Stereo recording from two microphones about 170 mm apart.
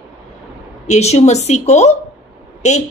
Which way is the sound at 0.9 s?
40° left (ahead or behind).